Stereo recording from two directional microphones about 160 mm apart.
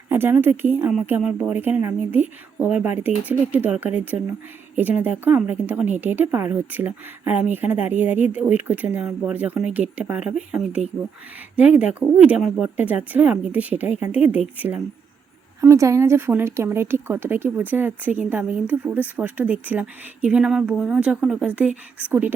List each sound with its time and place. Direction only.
0.1 s speech: 15° right (ahead or behind)